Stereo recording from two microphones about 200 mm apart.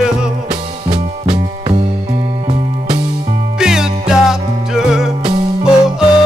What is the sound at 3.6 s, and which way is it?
Music, 5° right (ahead or behind).